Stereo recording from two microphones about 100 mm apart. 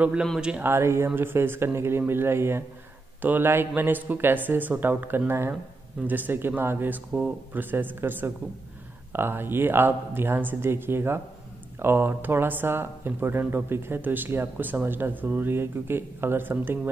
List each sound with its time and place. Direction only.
0.0 s speech: 10° right (ahead or behind)
0.7 s speech: 25° right (ahead or behind)
7.1 s speech: 10° right (ahead or behind)